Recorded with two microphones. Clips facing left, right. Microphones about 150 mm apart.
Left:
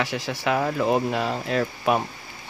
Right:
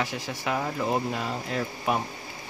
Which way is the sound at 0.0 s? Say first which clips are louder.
Left 4 dB; 80° left.